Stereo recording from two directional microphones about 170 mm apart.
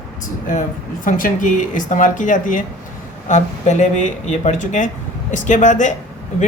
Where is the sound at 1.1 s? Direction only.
50° left (ahead or behind).